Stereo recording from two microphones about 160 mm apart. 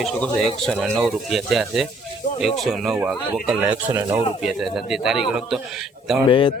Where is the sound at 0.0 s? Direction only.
Centre (ahead or behind).